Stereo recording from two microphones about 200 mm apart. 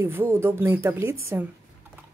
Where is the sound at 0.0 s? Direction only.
10° right (ahead or behind).